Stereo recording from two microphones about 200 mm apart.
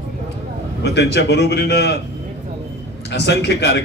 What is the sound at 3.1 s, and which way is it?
Speech, 60° left (ahead or behind).